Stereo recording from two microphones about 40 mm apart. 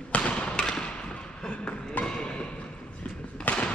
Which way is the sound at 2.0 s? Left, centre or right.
Left.